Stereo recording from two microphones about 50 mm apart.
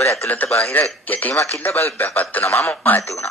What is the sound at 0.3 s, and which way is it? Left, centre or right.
Speech, left.